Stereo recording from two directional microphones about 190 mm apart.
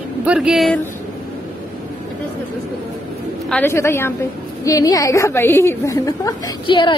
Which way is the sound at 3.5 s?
10° left (ahead or behind).